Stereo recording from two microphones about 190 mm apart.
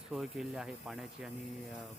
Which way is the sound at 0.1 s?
Centre (ahead or behind).